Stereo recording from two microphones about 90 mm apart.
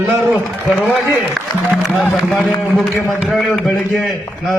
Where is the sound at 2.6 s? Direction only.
5° left (ahead or behind).